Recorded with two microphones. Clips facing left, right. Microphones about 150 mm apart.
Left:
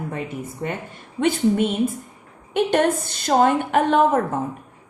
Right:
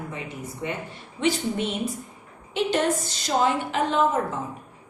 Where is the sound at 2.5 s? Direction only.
55° left (ahead or behind).